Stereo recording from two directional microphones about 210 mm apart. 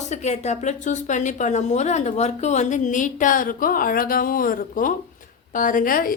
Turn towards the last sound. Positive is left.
turn(degrees=40)  # may be behind; listen again after turning